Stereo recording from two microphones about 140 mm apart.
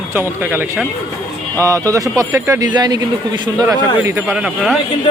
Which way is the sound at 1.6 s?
25° right (ahead or behind).